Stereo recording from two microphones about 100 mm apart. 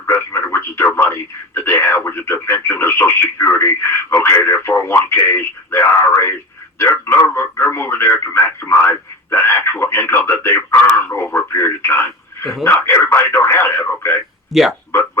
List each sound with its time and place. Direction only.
0.0 s a sound: 25° left (ahead or behind)
0.9 s speech: 25° left (ahead or behind)
14.5 s speech: centre (ahead or behind)